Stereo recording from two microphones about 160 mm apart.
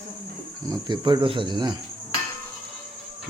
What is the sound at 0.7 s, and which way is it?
Speech, 30° right (ahead or behind).